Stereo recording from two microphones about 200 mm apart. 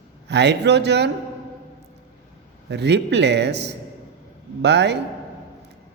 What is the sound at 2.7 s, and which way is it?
A man's voice, 60° right (ahead or behind).